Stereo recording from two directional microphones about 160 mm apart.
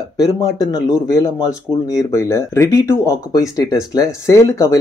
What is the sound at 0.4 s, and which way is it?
Speech, 25° left (ahead or behind).